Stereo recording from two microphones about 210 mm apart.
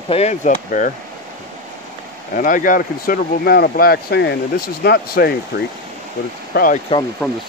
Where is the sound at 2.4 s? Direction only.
40° left (ahead or behind).